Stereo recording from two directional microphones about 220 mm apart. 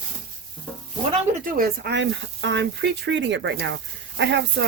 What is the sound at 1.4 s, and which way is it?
Speech, 45° right (ahead or behind).